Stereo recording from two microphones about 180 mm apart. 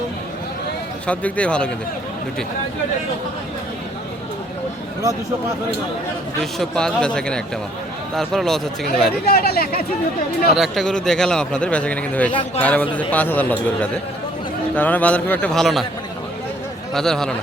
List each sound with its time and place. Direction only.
1.0 s speech: 5° left (ahead or behind)
6.4 s a man's voice: centre (ahead or behind)
9.2 s speech: 60° left (ahead or behind)
10.5 s a man's voice: centre (ahead or behind)
12.3 s speech: 25° left (ahead or behind)
12.6 s speech: 10° left (ahead or behind)
14.8 s speech: 10° left (ahead or behind)
16.9 s a man's voice: centre (ahead or behind)